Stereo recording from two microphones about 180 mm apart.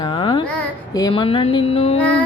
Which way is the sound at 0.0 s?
30° left (ahead or behind).